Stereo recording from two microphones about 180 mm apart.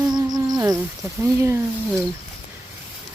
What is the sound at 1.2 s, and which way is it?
Speech, 15° right (ahead or behind).